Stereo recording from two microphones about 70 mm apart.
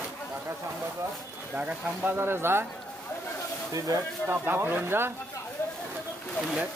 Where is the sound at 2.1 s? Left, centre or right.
Right.